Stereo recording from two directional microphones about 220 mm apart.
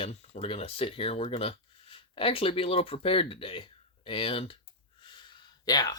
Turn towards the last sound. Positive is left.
turn(degrees=20)  # may be behind; listen again after turning